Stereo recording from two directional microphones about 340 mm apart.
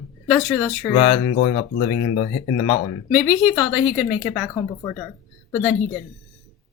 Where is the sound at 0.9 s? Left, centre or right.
Centre.